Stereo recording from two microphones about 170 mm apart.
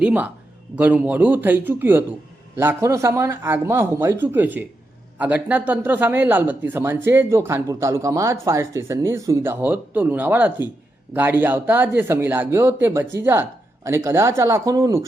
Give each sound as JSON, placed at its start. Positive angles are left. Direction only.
{"t": 0.0, "sound": "speech", "side_deg": -10}